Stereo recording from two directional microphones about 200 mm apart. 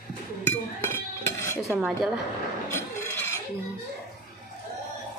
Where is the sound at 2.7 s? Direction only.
10° left (ahead or behind).